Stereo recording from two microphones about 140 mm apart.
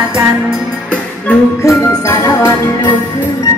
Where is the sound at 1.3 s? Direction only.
25° left (ahead or behind).